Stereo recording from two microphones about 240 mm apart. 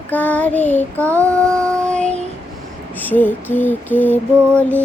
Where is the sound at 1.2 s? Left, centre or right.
Centre.